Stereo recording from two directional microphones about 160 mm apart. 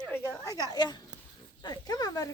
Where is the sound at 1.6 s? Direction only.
25° left (ahead or behind).